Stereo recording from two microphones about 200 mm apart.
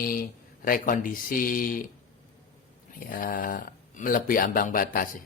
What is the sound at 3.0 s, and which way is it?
Speech, 45° left (ahead or behind).